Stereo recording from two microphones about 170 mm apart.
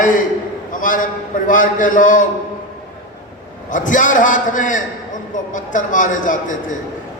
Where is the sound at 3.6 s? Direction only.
50° left (ahead or behind).